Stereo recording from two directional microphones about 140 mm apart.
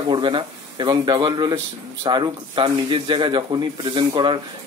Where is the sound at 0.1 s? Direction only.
35° right (ahead or behind).